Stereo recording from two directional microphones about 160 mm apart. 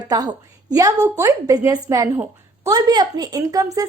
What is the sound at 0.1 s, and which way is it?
A woman's voice, 20° right (ahead or behind).